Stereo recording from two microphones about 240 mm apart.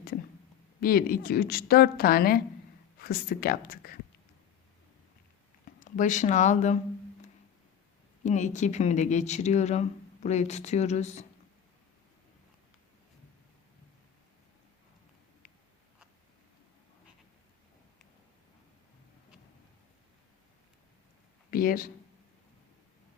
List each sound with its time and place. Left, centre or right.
0.8 s a woman's voice: left
5.8 s speech: left
8.2 s speech: left
21.5 s speech: left